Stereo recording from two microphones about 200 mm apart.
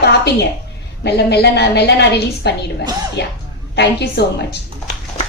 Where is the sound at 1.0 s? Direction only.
55° left (ahead or behind).